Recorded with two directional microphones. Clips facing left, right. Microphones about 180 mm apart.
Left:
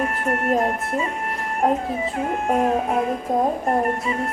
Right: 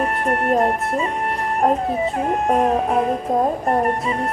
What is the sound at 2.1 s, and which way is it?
Speech, 35° right (ahead or behind).